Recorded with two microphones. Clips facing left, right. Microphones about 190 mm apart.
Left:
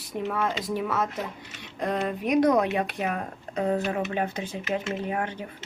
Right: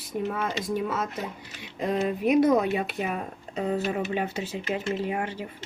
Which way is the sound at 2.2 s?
5° right (ahead or behind).